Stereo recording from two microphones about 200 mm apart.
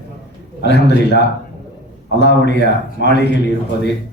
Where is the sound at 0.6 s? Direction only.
60° left (ahead or behind).